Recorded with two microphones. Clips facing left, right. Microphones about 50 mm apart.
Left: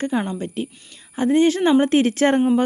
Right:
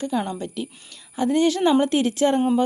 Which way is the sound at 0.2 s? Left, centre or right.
Left.